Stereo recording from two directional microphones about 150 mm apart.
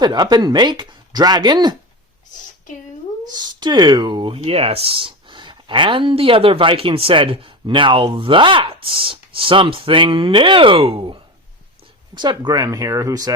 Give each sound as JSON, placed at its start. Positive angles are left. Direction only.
{"t": 0.0, "sound": "speech", "side_deg": -30}
{"t": 3.3, "sound": "speech", "side_deg": -30}